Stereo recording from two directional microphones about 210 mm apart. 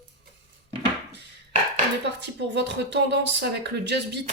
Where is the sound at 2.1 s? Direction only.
55° right (ahead or behind).